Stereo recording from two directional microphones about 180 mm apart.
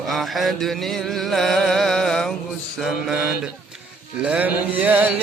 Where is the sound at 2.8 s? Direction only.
Centre (ahead or behind).